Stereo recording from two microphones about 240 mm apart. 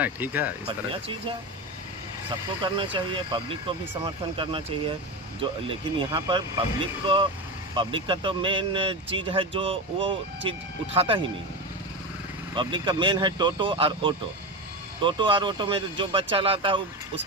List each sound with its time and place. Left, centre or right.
0.0 s speech: centre
2.7 s speech: right
12.5 s speech: centre